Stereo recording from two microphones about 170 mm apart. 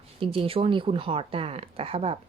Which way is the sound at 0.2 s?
30° right (ahead or behind).